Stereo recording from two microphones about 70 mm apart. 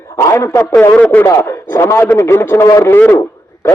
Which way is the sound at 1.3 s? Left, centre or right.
Left.